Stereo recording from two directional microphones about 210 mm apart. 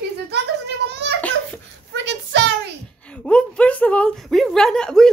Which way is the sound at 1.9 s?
55° right (ahead or behind).